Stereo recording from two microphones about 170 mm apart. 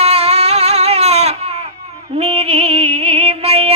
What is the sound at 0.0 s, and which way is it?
Baby cry, 40° right (ahead or behind).